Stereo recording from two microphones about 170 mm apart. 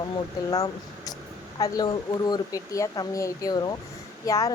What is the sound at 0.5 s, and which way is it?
Speech, 20° left (ahead or behind).